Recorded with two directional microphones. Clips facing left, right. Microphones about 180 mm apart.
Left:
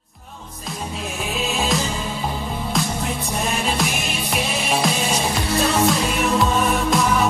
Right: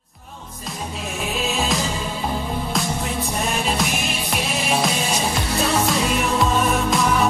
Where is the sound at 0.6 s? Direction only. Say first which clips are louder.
Left 1 dB; centre (ahead or behind).